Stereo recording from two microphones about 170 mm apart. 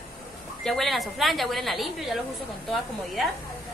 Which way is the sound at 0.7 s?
Centre (ahead or behind).